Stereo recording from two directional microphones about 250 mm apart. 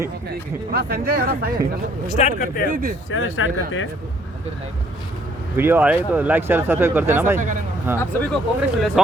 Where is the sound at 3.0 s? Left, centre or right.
Left.